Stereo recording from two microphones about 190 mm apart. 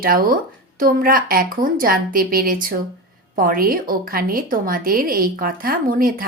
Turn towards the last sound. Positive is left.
turn(degrees=-50)  # may be behind; listen again after turning